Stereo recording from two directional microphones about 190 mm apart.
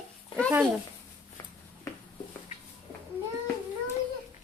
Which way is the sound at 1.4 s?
15° left (ahead or behind).